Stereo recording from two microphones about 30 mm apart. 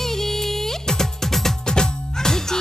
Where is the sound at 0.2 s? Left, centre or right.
Centre.